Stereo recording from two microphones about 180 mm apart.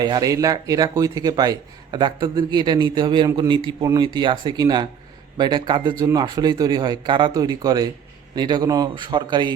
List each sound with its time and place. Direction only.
0.0 s speech: 20° right (ahead or behind)